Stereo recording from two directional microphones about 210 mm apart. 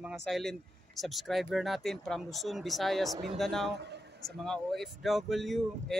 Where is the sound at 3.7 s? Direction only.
55° right (ahead or behind).